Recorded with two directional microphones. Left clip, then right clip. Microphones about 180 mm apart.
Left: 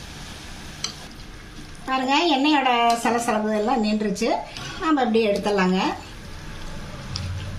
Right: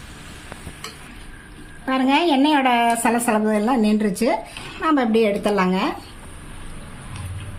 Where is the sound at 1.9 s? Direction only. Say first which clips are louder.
Right 2 dB; 50° right (ahead or behind).